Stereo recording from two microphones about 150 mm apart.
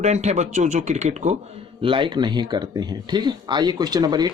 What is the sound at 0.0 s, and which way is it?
Speech, 50° right (ahead or behind).